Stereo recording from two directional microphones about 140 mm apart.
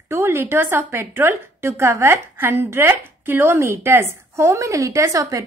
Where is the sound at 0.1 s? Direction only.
15° right (ahead or behind).